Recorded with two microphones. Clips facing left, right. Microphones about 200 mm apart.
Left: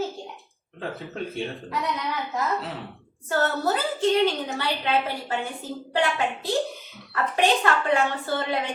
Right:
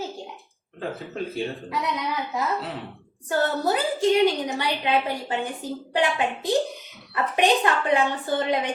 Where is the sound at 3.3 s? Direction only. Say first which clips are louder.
Right 1 dB; 15° right (ahead or behind).